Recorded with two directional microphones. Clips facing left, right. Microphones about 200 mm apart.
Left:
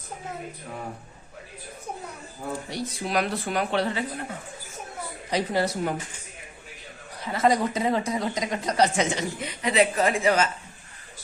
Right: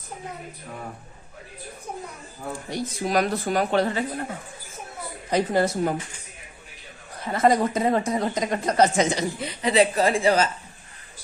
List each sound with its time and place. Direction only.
2.6 s speech: 45° right (ahead or behind)
5.3 s speech: 50° right (ahead or behind)
7.3 s speech: 50° right (ahead or behind); by 10.5 s 35° right (ahead or behind)